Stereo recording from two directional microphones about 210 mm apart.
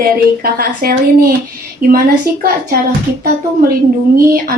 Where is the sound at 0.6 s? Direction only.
45° right (ahead or behind).